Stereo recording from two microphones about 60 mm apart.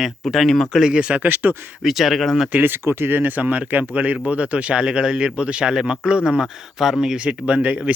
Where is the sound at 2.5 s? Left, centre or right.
Right; by 7.2 s centre.